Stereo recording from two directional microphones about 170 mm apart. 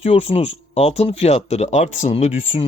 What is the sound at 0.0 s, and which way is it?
Speech, 35° left (ahead or behind).